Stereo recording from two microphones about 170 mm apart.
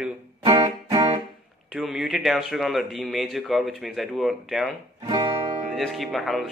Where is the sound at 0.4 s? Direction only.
20° right (ahead or behind).